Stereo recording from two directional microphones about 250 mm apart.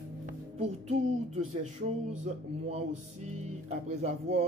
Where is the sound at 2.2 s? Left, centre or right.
Right.